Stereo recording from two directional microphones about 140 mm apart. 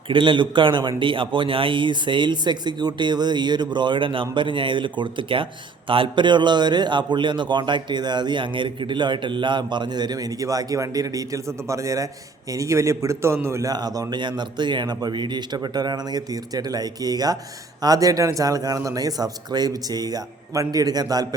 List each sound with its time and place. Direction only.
0.1 s a man's voice: 35° right (ahead or behind)